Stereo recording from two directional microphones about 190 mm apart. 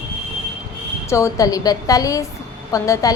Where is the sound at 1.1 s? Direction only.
15° left (ahead or behind).